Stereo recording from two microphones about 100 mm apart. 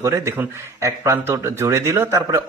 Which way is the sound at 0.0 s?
30° right (ahead or behind).